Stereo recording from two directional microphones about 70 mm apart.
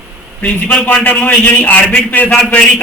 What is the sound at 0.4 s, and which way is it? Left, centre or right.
A man's voice, left.